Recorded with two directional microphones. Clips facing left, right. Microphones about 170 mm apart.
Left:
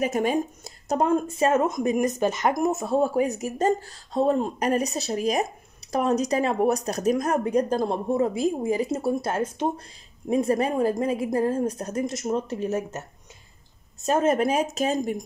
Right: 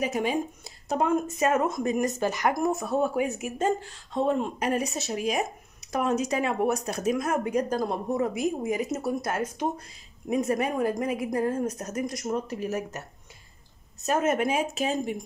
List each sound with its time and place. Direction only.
0.0 s speech: 45° left (ahead or behind); by 13.0 s 25° left (ahead or behind)
14.0 s speech: 30° left (ahead or behind)